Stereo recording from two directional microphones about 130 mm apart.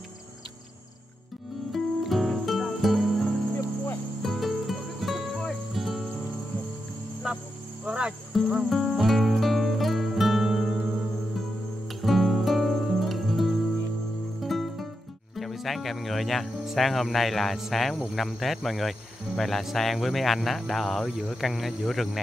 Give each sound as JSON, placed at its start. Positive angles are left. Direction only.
{"t": 1.7, "sound": "music", "side_deg": 0}
{"t": 3.6, "sound": "cricket", "side_deg": 20}
{"t": 4.2, "sound": "music", "side_deg": 0}
{"t": 7.2, "sound": "cricket", "side_deg": -5}
{"t": 7.8, "sound": "music", "side_deg": -5}
{"t": 12.0, "sound": "music", "side_deg": 0}
{"t": 15.3, "sound": "speech", "side_deg": 0}